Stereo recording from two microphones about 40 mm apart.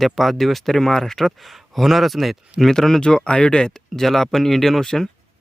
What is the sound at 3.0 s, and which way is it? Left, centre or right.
Speech, left.